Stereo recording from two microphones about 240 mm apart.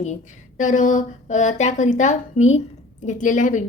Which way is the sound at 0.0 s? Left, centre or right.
Left.